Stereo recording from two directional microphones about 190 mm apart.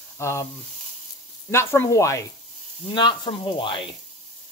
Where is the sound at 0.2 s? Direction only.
15° left (ahead or behind).